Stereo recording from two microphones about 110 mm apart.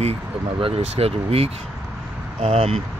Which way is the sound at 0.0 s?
65° right (ahead or behind).